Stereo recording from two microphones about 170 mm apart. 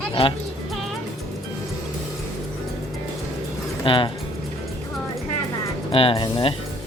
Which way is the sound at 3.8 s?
30° left (ahead or behind).